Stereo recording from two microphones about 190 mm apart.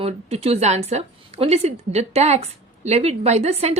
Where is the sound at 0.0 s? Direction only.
30° right (ahead or behind).